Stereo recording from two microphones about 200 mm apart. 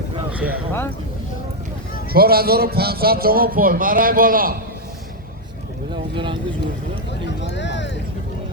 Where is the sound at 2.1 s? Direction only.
50° right (ahead or behind).